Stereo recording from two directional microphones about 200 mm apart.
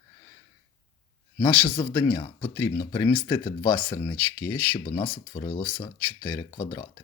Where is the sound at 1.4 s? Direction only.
20° left (ahead or behind).